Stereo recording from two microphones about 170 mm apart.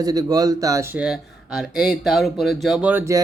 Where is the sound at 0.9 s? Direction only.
5° right (ahead or behind).